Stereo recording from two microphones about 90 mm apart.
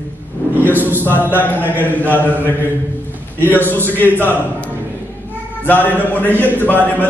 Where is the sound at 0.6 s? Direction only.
20° right (ahead or behind).